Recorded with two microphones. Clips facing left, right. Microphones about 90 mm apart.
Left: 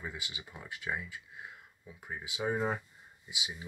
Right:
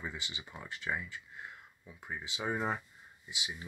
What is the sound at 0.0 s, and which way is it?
Speech, 5° left (ahead or behind).